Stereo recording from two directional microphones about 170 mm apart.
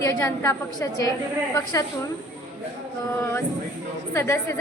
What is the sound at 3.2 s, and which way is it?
A woman's voice, 15° left (ahead or behind).